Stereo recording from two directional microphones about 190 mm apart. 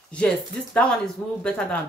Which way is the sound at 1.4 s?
5° left (ahead or behind).